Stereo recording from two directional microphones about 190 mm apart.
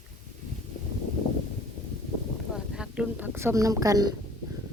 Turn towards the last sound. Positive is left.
turn(degrees=-20)  # may be behind; listen again after turning